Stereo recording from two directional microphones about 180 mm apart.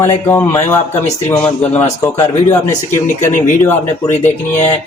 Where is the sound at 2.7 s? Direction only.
45° left (ahead or behind).